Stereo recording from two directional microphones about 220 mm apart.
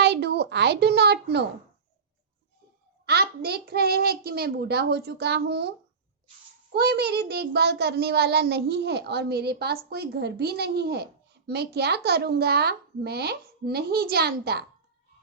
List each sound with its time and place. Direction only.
0.0 s a sound: 50° right (ahead or behind)
3.1 s a child's voice: 45° right (ahead or behind)
6.7 s a child's voice: 45° right (ahead or behind)